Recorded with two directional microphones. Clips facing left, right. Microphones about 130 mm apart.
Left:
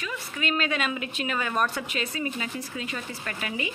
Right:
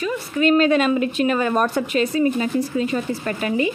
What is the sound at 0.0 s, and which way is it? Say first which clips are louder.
A woman's voice: right 12 dB; 40° right (ahead or behind).